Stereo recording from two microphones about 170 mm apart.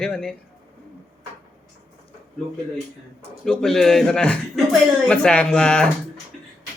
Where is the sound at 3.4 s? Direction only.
5° left (ahead or behind).